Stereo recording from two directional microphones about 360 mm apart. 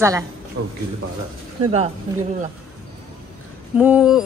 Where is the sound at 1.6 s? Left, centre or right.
Centre.